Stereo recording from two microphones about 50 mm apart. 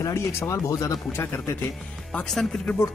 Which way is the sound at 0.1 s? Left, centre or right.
Left.